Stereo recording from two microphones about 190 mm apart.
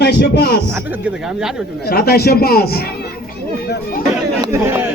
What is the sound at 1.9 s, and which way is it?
Speech, 55° left (ahead or behind).